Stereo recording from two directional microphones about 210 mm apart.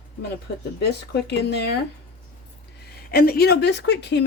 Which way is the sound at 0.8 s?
50° left (ahead or behind).